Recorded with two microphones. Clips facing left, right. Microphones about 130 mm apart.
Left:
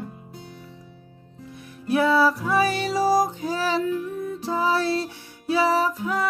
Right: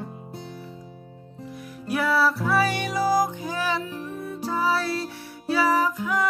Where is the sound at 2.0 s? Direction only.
20° left (ahead or behind).